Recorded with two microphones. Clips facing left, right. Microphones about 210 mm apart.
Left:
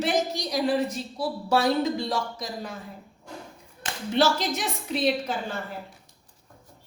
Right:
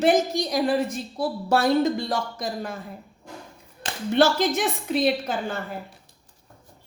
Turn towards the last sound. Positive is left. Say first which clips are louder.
# right 2 dB
turn(degrees=-50)  # may be behind; listen again after turning